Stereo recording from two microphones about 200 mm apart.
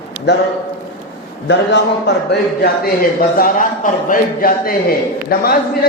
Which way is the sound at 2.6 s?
50° left (ahead or behind).